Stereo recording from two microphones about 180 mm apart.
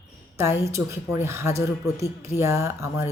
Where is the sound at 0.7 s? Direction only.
15° right (ahead or behind).